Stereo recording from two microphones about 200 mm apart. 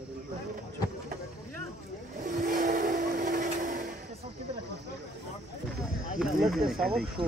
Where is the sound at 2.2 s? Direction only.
40° right (ahead or behind).